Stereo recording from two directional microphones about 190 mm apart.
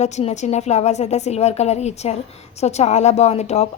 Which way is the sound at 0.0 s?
35° left (ahead or behind).